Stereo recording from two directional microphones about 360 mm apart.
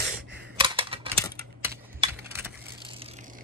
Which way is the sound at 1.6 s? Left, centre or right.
Centre.